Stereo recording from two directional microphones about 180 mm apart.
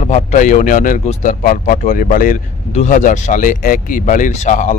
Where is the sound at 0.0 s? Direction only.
40° left (ahead or behind).